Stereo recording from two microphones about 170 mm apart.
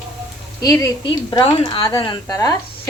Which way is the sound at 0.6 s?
15° left (ahead or behind).